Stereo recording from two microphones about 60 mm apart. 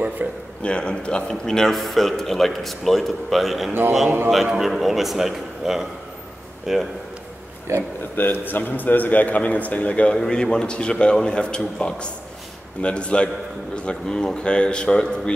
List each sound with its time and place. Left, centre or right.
0.2 s a man's voice: right
0.6 s a man's voice: centre
7.7 s speech: right
8.2 s a man's voice: left; by 15.3 s centre